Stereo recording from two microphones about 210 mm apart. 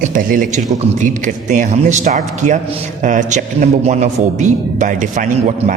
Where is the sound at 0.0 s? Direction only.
40° right (ahead or behind).